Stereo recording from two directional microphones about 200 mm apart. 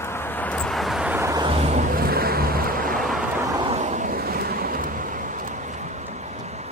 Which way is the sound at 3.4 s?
20° right (ahead or behind).